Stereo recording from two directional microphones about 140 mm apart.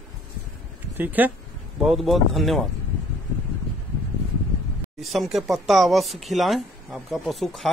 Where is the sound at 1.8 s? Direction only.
Centre (ahead or behind).